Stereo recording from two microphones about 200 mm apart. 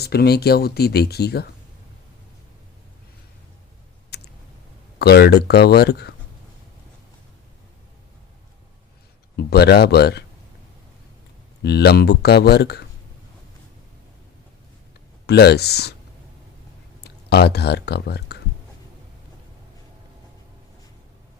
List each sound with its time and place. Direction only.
0.0 s speech: 50° left (ahead or behind)
4.1 s a sound: 55° left (ahead or behind)
4.9 s speech: 55° left (ahead or behind)
9.3 s speech: 55° left (ahead or behind)
11.6 s speech: 55° left (ahead or behind)
15.3 s speech: 55° left (ahead or behind)
17.0 s speech: 55° left (ahead or behind)